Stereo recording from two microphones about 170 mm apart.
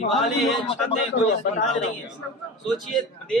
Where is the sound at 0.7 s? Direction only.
35° left (ahead or behind).